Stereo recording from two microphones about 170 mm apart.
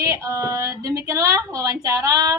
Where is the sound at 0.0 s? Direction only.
20° right (ahead or behind).